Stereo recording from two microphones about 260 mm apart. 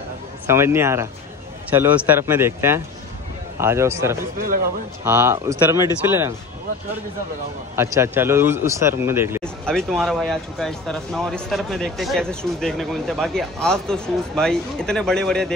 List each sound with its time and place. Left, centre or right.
0.5 s a man's voice: centre
4.2 s speech: right
5.0 s a man's voice: centre
7.7 s a man's voice: centre
9.4 s speech: centre